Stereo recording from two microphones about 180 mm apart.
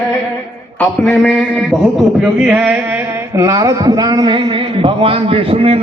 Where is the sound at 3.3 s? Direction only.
20° right (ahead or behind).